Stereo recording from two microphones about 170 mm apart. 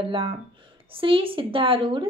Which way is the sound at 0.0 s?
30° right (ahead or behind).